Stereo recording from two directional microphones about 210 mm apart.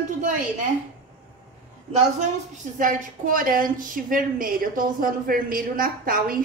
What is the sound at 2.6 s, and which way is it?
A woman's voice, 40° right (ahead or behind).